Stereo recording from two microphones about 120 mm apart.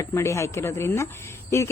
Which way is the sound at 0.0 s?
25° left (ahead or behind).